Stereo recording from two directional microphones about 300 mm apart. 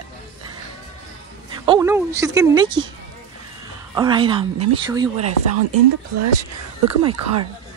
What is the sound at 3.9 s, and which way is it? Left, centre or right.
Speech, centre.